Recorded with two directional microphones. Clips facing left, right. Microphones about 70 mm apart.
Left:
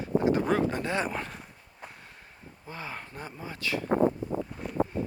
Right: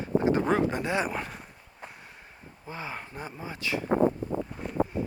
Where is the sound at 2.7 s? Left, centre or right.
Centre.